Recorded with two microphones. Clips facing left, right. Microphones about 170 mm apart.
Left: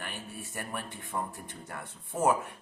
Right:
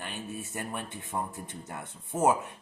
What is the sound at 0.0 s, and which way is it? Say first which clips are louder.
Speech: right 3 dB; 20° right (ahead or behind).